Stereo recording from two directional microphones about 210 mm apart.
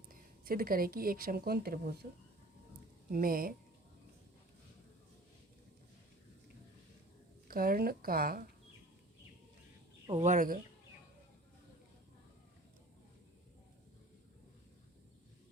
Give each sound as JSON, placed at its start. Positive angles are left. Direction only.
{"t": 0.1, "sound": "speech", "side_deg": -45}
{"t": 3.1, "sound": "speech", "side_deg": -45}
{"t": 7.4, "sound": "speech", "side_deg": -45}
{"t": 10.1, "sound": "speech", "side_deg": -30}